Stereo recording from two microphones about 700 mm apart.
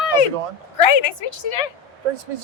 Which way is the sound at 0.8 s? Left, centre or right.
Left.